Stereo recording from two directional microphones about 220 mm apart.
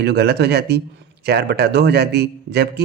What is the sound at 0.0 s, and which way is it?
Speech, 50° right (ahead or behind).